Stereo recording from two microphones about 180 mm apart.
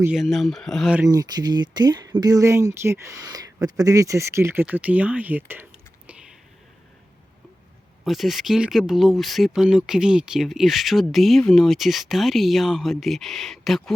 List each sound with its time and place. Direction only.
0.0 s speech: 5° right (ahead or behind)
1.0 s speech: 20° right (ahead or behind)
8.0 s speech: centre (ahead or behind)